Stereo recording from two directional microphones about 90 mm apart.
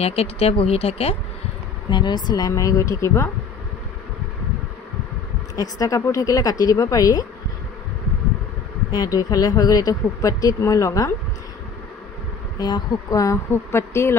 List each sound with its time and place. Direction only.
0.4 s speech: 90° left
1.9 s speech: 55° left (ahead or behind); by 3.3 s 35° left (ahead or behind)
5.6 s speech: 45° left (ahead or behind)
8.9 s speech: 50° left (ahead or behind)
12.5 s speech: 50° left (ahead or behind); by 14.1 s 30° left (ahead or behind)